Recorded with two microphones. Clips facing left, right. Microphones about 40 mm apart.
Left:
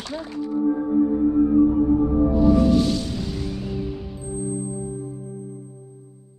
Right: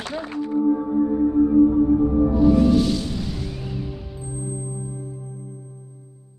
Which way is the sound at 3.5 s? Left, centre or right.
Centre.